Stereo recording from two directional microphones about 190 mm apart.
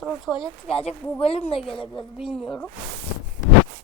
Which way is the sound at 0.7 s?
30° left (ahead or behind).